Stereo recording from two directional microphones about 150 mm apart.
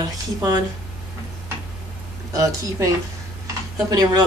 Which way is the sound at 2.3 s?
25° right (ahead or behind).